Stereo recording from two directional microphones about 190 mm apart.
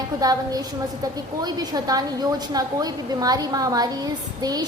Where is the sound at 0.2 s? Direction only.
20° right (ahead or behind).